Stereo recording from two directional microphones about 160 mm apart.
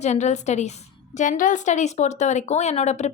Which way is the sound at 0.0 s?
45° left (ahead or behind).